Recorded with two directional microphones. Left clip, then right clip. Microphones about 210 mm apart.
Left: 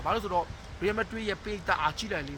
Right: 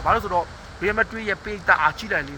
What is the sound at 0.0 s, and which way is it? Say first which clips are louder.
Speech: right 8 dB; 15° left (ahead or behind).